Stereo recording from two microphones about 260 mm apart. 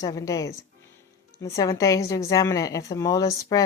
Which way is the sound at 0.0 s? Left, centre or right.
Centre.